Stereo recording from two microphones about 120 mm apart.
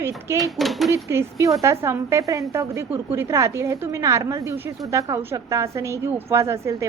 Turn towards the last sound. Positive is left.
turn(degrees=-25)  # may be behind; listen again after turning